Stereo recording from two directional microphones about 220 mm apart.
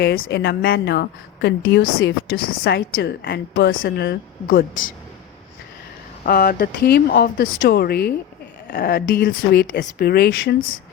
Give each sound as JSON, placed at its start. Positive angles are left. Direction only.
{"t": 0.0, "sound": "a woman's voice", "side_deg": 45}
{"t": 6.2, "sound": "a woman's voice", "side_deg": 40}